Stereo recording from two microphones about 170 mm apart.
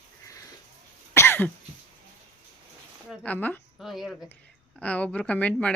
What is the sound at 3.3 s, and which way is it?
A woman's voice, 10° left (ahead or behind).